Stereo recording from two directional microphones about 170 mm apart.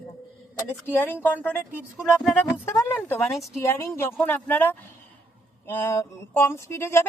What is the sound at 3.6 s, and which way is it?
A woman's voice, 15° left (ahead or behind).